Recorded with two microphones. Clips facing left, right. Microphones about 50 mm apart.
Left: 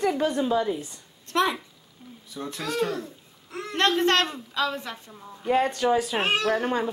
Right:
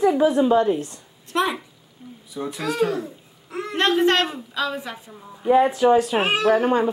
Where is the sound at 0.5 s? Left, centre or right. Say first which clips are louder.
Right 7 dB; right.